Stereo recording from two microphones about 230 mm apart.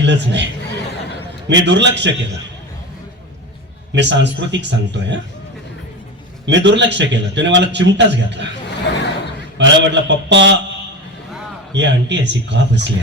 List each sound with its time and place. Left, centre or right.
0.0 s a man's voice: right
3.9 s a man's voice: right
6.4 s a man's voice: right
8.9 s a sound: left
9.6 s a man's voice: right
11.7 s a man's voice: right